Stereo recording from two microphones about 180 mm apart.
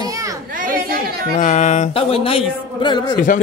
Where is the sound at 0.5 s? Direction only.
50° right (ahead or behind).